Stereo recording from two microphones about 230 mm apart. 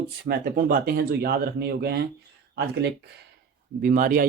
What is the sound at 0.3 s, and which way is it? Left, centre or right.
Speech, right.